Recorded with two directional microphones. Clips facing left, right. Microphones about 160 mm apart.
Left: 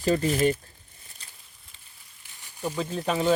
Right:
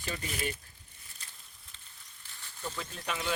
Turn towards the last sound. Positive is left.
turn(degrees=40)  # may be behind; listen again after turning